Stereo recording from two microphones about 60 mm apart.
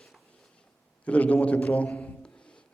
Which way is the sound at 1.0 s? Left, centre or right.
Left.